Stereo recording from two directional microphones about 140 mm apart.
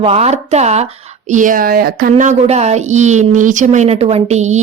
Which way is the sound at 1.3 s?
65° right (ahead or behind).